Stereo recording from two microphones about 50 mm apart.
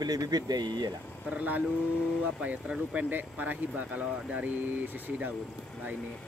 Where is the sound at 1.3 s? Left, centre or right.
Right.